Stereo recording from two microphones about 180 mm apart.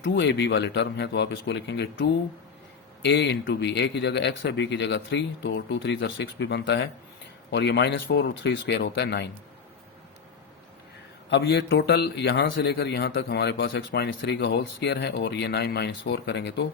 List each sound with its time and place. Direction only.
0.0 s a man's voice: 75° left (ahead or behind)
7.5 s a man's voice: 70° left (ahead or behind)
11.3 s a man's voice: 75° left (ahead or behind)